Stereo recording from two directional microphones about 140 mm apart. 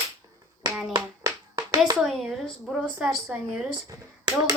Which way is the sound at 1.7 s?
25° right (ahead or behind).